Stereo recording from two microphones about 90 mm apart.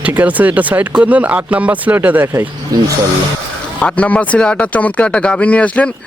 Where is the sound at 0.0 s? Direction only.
20° right (ahead or behind).